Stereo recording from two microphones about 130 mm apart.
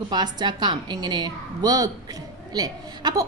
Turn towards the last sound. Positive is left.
turn(degrees=-30)  # may be behind; listen again after turning